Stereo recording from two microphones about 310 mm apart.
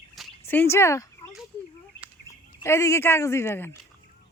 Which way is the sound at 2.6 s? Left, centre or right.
Centre.